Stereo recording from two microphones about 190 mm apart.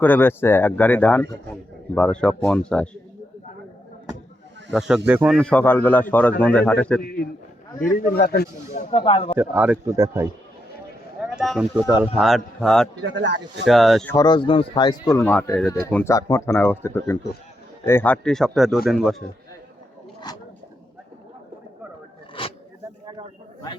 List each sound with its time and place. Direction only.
0.0 s speech: 10° left (ahead or behind)
4.7 s speech: 5° right (ahead or behind)
5.4 s speech: 5° left (ahead or behind)
7.9 s a man's voice: 45° left (ahead or behind)
8.7 s speech: 30° left (ahead or behind)
9.4 s speech: 10° right (ahead or behind)
11.2 s speech: 5° right (ahead or behind)
13.0 s speech: 70° right (ahead or behind)
13.7 s speech: centre (ahead or behind)
14.1 s speech: 20° left (ahead or behind); by 19.1 s centre (ahead or behind)
20.3 s a sound: 20° left (ahead or behind)
22.4 s a sound: 25° left (ahead or behind)